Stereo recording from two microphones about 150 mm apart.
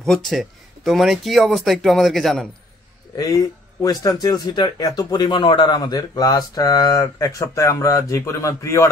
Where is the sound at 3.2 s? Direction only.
20° left (ahead or behind).